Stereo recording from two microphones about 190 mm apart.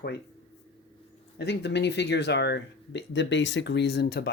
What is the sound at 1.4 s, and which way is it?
Speech, 65° left (ahead or behind).